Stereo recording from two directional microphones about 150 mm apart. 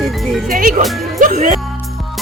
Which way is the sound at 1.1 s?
55° right (ahead or behind).